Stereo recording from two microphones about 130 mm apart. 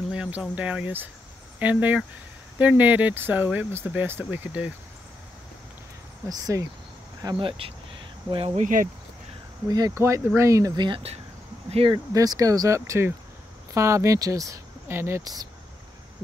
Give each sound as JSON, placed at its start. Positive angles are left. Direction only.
{"t": 0.1, "sound": "speech", "side_deg": -5}
{"t": 6.2, "sound": "speech", "side_deg": -25}
{"t": 7.2, "sound": "speech", "side_deg": -40}
{"t": 8.5, "sound": "speech", "side_deg": -90}
{"t": 9.7, "sound": "speech", "side_deg": -30}
{"t": 10.9, "sound": "speech", "side_deg": -50}
{"t": 11.9, "sound": "speech", "side_deg": -30}